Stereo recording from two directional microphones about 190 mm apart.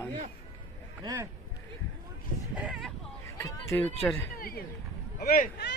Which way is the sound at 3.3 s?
15° left (ahead or behind).